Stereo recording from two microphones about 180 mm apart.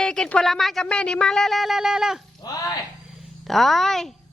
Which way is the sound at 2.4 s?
20° left (ahead or behind).